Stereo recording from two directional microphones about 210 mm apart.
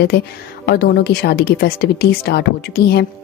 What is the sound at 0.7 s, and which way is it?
A woman's voice, 50° left (ahead or behind).